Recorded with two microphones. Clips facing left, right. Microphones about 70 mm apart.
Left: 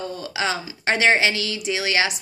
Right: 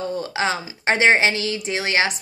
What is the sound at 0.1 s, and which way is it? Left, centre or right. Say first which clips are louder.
A woman's voice: right 2 dB; right.